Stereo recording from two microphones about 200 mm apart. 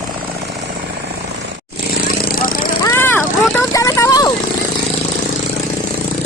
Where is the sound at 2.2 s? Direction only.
45° left (ahead or behind).